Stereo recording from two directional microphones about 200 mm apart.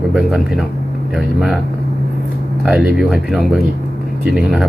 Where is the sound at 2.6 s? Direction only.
5° right (ahead or behind).